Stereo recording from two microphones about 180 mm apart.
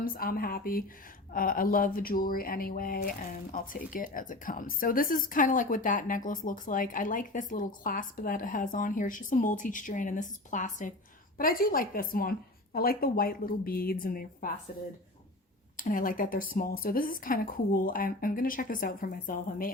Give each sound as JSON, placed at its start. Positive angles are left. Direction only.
{"t": 0.0, "sound": "speech", "side_deg": 55}
{"t": 15.8, "sound": "speech", "side_deg": 50}